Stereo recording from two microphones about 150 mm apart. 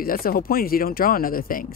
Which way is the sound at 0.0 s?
75° left (ahead or behind).